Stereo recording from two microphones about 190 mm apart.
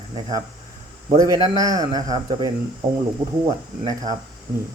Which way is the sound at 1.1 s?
20° right (ahead or behind).